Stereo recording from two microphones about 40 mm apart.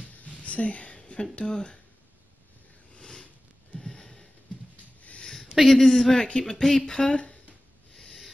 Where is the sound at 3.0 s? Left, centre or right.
Centre.